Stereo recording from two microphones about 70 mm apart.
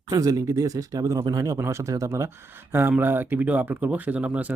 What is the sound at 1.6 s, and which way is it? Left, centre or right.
Speech, right.